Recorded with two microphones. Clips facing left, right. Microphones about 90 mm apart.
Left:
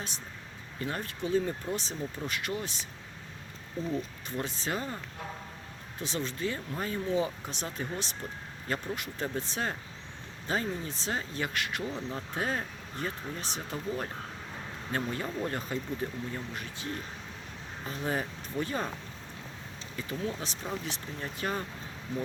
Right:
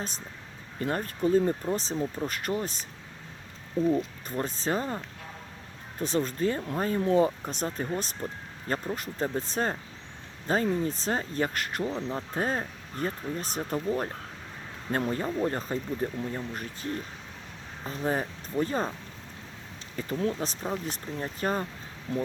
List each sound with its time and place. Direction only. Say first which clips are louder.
0.8 s speech: right 6 dB; 40° right (ahead or behind)
4.3 s speech: right 4 dB; 40° right (ahead or behind)
6.0 s speech: right 6 dB; 45° right (ahead or behind)
11.9 s speech: right 4 dB; 25° right (ahead or behind)
12.3 s speech: right 2 dB; 40° right (ahead or behind)
14.9 s speech: right 5 dB; 35° right (ahead or behind)
20.0 s speech: right 6 dB; 45° right (ahead or behind)